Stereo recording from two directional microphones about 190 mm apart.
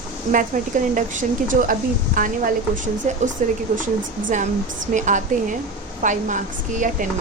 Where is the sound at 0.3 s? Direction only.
45° right (ahead or behind).